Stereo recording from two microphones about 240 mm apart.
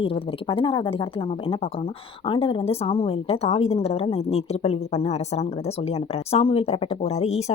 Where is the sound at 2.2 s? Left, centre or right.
Left.